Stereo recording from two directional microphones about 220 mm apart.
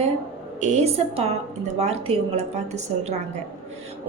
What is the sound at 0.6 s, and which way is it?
A woman's voice, 30° right (ahead or behind).